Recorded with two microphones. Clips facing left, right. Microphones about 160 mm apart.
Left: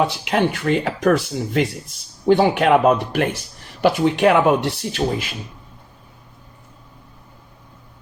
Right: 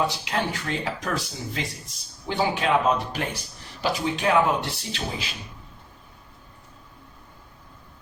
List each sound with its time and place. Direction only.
0.0 s speech: 65° left (ahead or behind)